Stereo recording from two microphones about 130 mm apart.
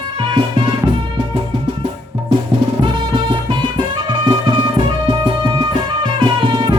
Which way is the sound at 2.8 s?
40° right (ahead or behind).